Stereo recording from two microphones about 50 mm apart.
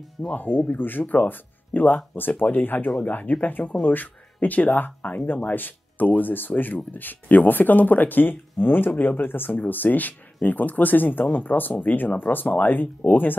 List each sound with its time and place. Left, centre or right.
0.2 s speech: centre
0.7 s speech: left